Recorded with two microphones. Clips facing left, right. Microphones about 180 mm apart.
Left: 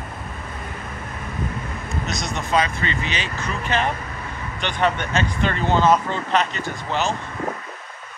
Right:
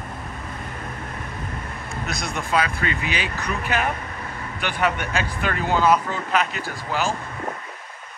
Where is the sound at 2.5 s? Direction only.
10° right (ahead or behind).